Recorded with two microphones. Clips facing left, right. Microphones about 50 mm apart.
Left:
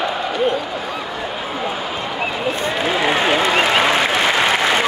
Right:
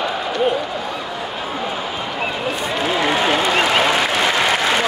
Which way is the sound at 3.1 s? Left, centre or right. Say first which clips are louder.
Left 1 dB; centre.